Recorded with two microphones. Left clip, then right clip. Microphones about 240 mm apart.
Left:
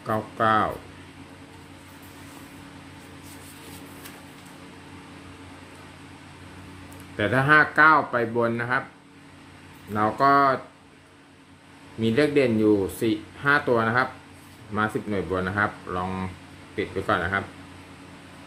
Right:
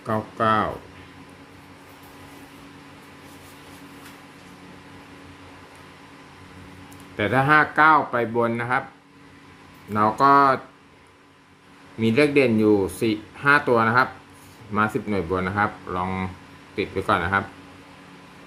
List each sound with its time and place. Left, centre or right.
0.0 s speech: centre
7.2 s speech: centre
9.9 s speech: centre
11.9 s speech: centre